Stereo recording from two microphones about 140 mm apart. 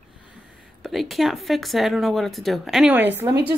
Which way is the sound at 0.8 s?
Centre (ahead or behind).